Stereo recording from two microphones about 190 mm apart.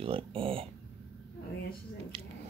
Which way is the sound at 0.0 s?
30° right (ahead or behind).